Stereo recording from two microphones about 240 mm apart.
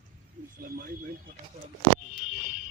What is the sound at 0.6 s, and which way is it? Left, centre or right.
Speech, right.